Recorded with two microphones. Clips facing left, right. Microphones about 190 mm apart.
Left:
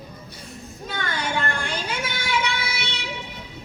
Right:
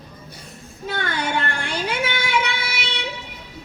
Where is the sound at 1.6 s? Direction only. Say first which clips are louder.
Right 4 dB; 60° right (ahead or behind).